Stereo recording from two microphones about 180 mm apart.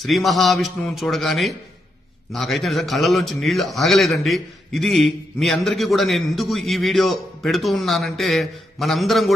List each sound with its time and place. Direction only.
0.0 s a man's voice: centre (ahead or behind)